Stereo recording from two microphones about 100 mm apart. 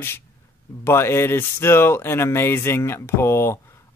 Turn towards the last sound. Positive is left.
turn(degrees=25)  # may be behind; listen again after turning